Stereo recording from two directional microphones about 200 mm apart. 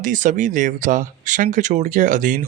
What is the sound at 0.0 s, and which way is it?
A man's voice, 40° right (ahead or behind).